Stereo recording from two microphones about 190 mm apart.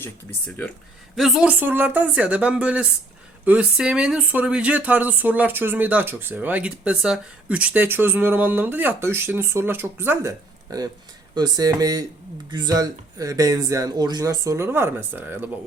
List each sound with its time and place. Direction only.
0.4 s speech: 10° left (ahead or behind)
1.1 s speech: centre (ahead or behind)